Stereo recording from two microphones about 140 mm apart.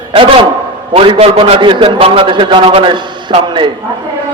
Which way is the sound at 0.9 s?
45° right (ahead or behind).